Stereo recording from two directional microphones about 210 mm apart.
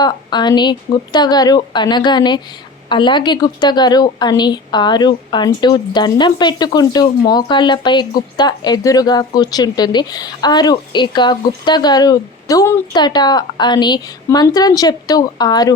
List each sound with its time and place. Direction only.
0.0 s speech: 20° left (ahead or behind)